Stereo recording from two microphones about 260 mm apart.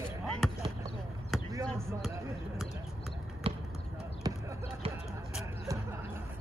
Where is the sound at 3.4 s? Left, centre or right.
Right.